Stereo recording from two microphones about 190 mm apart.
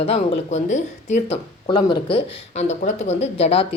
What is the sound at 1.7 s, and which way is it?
Speech, 25° left (ahead or behind).